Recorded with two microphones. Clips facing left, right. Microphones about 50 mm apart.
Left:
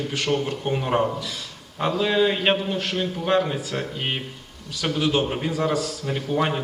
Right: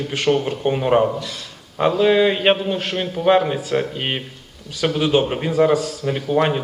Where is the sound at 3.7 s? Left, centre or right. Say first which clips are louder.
Right 6 dB; right.